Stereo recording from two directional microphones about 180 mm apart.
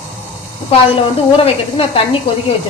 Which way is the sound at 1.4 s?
30° left (ahead or behind).